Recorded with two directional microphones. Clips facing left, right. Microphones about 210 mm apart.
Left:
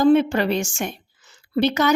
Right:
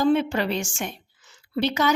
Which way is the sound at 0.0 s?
45° left (ahead or behind).